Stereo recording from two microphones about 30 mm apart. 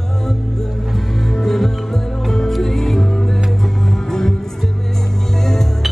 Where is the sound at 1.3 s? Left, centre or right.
Centre.